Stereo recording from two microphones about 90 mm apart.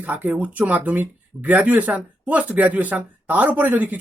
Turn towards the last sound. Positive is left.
turn(degrees=-20)  # may be behind; listen again after turning